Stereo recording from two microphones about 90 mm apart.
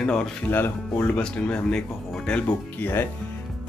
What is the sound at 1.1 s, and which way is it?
Speech, 10° left (ahead or behind).